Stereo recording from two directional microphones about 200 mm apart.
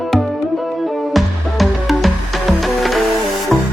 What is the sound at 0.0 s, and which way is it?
Music, centre (ahead or behind).